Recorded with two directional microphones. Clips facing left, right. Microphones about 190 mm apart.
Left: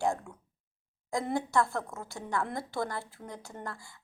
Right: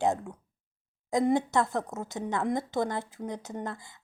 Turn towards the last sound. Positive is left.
turn(degrees=-20)  # may be behind; listen again after turning